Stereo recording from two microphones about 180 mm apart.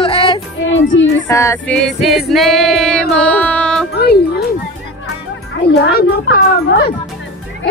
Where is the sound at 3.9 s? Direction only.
65° left (ahead or behind).